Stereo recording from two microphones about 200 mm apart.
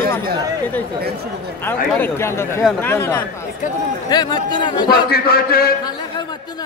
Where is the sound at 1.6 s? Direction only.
10° left (ahead or behind).